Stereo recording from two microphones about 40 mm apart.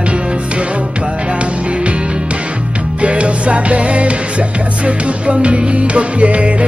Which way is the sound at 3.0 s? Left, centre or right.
Right.